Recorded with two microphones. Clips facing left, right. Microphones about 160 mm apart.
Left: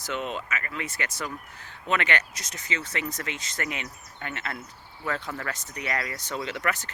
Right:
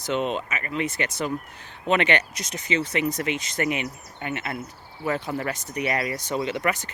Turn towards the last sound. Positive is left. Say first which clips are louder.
# right 4 dB
turn(degrees=-15)  # may be behind; listen again after turning